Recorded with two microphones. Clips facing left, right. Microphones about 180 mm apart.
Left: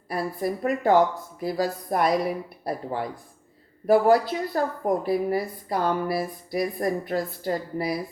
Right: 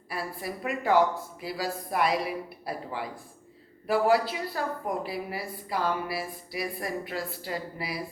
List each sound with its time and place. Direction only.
0.1 s a woman's voice: 40° left (ahead or behind)